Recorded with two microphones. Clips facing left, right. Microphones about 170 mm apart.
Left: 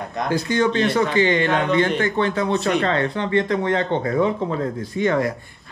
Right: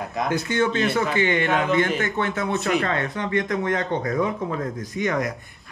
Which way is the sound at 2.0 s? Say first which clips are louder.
Left 4 dB; 30° left (ahead or behind).